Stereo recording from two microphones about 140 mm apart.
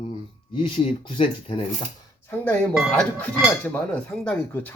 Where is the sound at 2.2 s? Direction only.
10° left (ahead or behind).